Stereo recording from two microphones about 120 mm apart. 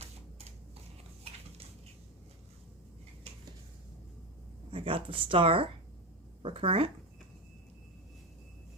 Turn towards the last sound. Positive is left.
turn(degrees=-50)  # may be behind; listen again after turning